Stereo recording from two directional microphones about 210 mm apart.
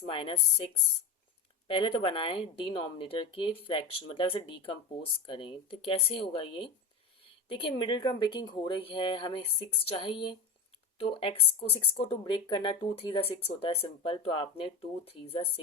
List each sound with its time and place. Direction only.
0.1 s speech: 25° left (ahead or behind)